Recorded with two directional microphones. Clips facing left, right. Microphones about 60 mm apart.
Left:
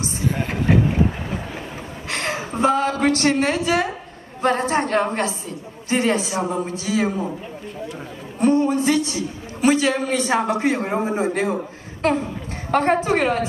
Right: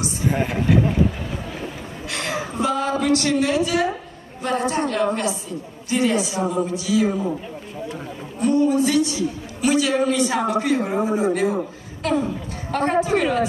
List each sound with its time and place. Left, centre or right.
2.0 s a woman's voice: left
8.4 s a man's voice: left